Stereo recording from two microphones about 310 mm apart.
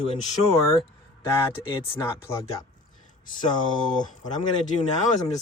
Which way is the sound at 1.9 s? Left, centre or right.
Centre.